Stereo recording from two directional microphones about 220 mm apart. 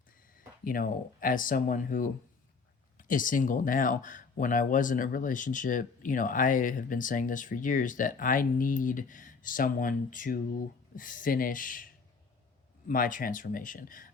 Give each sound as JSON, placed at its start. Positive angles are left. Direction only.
{"t": 0.3, "sound": "speech", "side_deg": 40}
{"t": 12.9, "sound": "speech", "side_deg": 40}